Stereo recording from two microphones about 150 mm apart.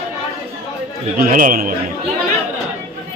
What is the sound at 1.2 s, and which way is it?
Speech, 65° right (ahead or behind).